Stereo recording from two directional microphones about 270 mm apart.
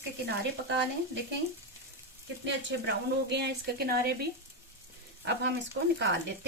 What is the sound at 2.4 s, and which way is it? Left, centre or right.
Speech, right.